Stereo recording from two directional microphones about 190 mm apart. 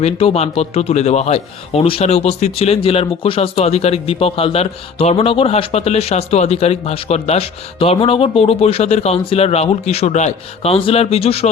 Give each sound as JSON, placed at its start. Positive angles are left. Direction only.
{"t": 0.0, "sound": "speech", "side_deg": 30}